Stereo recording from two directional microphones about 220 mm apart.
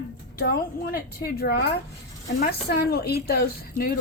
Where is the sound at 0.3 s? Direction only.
40° left (ahead or behind).